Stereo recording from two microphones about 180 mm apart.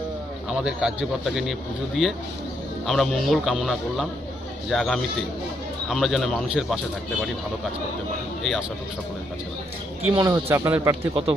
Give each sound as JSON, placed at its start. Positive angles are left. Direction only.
{"t": 0.5, "sound": "speech", "side_deg": -5}
{"t": 10.0, "sound": "speech", "side_deg": -15}